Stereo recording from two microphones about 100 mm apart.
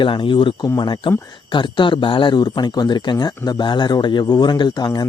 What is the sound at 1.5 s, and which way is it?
A man's voice, 50° left (ahead or behind).